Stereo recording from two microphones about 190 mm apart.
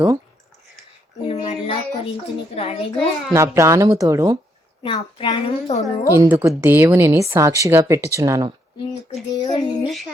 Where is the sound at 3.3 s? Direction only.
15° right (ahead or behind).